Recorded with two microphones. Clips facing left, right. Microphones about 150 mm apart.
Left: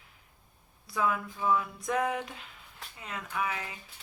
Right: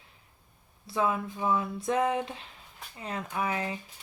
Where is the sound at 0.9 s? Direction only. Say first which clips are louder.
Right 2 dB; 25° right (ahead or behind).